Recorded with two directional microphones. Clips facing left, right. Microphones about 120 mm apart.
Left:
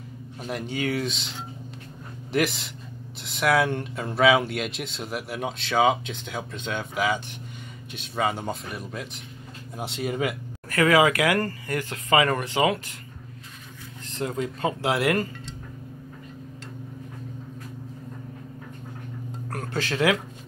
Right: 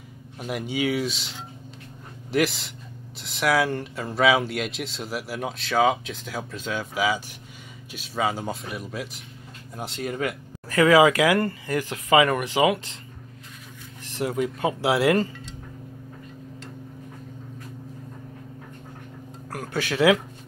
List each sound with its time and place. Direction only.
0.4 s speech: 10° right (ahead or behind)
2.3 s speech: centre (ahead or behind)
10.7 s speech: 20° right (ahead or behind)
14.1 s speech: 15° right (ahead or behind)
19.5 s music: 5° right (ahead or behind)